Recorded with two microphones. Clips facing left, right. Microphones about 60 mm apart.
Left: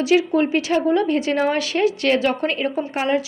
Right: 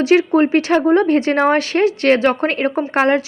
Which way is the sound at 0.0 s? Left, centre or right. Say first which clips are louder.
Right 4 dB; right.